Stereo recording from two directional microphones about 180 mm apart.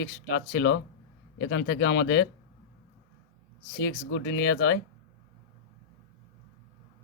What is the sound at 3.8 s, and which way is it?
Speech, 85° left.